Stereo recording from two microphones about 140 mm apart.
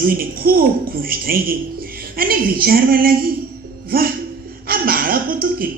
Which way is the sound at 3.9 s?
90° right.